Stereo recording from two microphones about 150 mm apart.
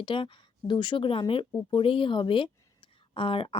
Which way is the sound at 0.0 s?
35° left (ahead or behind).